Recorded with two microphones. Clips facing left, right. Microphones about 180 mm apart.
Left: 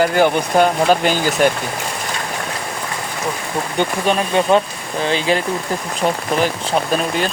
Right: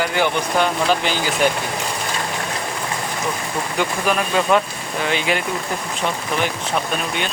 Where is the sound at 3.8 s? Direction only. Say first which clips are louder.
Left 3 dB; 30° left (ahead or behind).